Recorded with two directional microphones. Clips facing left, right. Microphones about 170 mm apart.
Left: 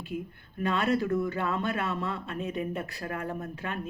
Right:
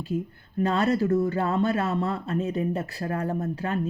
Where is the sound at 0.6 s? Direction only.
35° right (ahead or behind).